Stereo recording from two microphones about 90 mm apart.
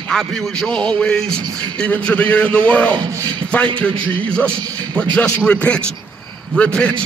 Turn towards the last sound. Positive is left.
turn(degrees=15)  # may be behind; listen again after turning